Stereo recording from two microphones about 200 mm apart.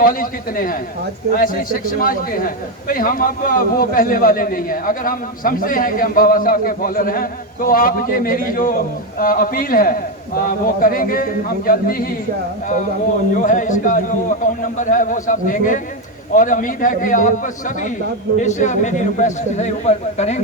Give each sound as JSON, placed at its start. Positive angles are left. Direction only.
{"t": 0.0, "sound": "a man's voice", "side_deg": 45}
{"t": 13.3, "sound": "a man's voice", "side_deg": 40}